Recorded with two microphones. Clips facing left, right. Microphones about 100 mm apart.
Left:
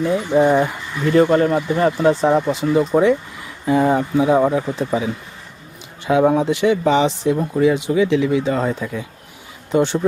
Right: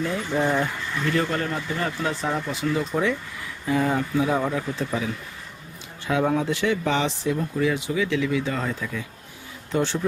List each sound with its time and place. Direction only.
0.0 s speech: 15° left (ahead or behind)